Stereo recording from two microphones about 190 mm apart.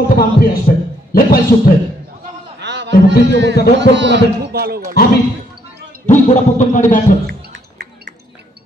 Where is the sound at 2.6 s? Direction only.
65° right (ahead or behind).